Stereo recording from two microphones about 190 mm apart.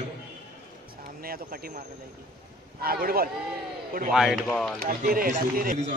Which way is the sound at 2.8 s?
50° right (ahead or behind).